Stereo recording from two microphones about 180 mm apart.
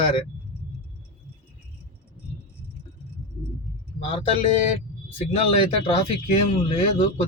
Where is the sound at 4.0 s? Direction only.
30° left (ahead or behind).